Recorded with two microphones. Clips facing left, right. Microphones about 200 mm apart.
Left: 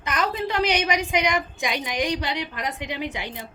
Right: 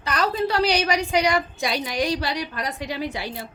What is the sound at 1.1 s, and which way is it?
Speech, 35° right (ahead or behind).